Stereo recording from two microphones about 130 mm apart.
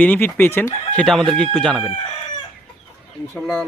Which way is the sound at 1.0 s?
5° left (ahead or behind).